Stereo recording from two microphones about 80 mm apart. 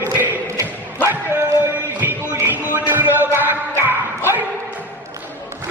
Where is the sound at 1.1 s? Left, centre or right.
Right.